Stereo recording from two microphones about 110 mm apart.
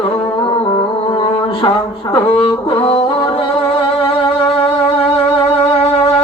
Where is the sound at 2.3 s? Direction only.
55° left (ahead or behind).